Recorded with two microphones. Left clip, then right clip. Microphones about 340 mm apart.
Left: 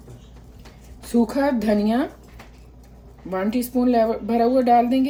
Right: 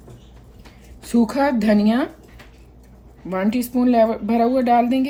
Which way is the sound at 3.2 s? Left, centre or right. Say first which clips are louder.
Right 2 dB; right.